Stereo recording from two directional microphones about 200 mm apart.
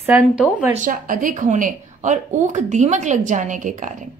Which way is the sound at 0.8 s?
45° right (ahead or behind).